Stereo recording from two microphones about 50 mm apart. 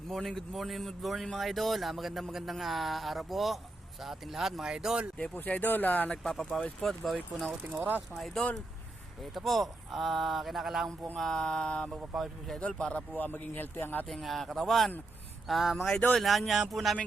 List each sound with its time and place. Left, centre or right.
0.1 s speech: centre
5.1 s speech: left
5.4 s speech: left
6.2 s mantra: centre
6.8 s speech: centre
7.8 s speech: right
8.1 s speech: centre
11.2 s mantra: centre
11.9 s speech: centre
12.5 s mantra: centre
13.1 s speech: left
14.1 s speech: centre